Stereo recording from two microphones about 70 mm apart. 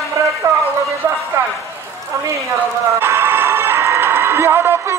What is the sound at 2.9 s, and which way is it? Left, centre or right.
Music, right.